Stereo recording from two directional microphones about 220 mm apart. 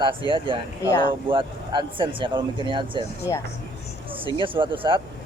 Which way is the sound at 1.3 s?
20° right (ahead or behind).